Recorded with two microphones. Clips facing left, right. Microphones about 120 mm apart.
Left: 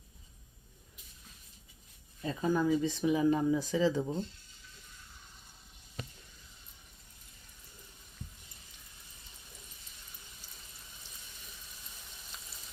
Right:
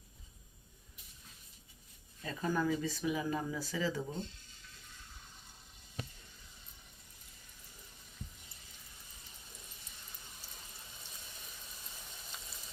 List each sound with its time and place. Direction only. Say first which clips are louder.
2.2 s speech: left 4 dB; 15° left (ahead or behind)